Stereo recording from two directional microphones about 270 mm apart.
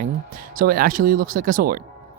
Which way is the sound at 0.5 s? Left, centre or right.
Right.